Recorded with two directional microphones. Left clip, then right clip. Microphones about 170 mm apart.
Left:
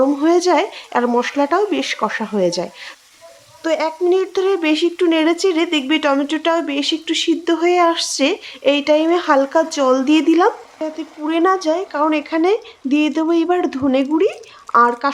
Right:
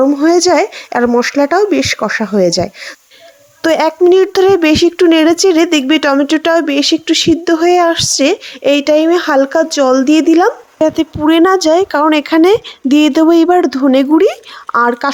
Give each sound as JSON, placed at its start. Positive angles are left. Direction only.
{"t": 0.0, "sound": "speech", "side_deg": -30}
{"t": 3.6, "sound": "speech", "side_deg": -55}
{"t": 10.8, "sound": "speech", "side_deg": -55}
{"t": 13.6, "sound": "speech", "side_deg": -35}